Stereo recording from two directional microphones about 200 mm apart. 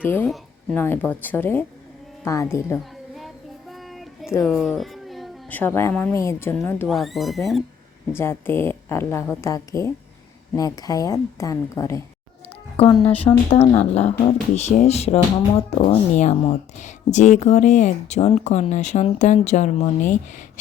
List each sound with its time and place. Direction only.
0.0 s speech: 10° left (ahead or behind)
4.4 s a woman's voice: centre (ahead or behind)
6.8 s speech: centre (ahead or behind)
8.1 s speech: 10° left (ahead or behind)
12.7 s a woman's voice: 30° left (ahead or behind)